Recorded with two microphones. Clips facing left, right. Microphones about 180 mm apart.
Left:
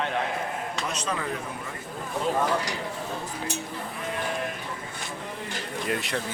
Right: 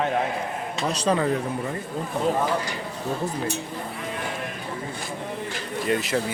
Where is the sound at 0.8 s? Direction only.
35° right (ahead or behind).